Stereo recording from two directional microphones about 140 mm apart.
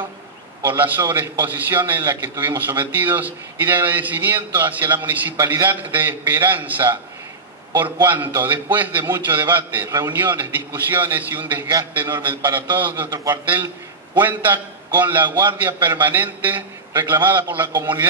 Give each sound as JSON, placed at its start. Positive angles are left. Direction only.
{"t": 0.6, "sound": "a man's voice", "side_deg": -15}
{"t": 13.1, "sound": "a man's voice", "side_deg": -25}
{"t": 14.2, "sound": "a man's voice", "side_deg": -15}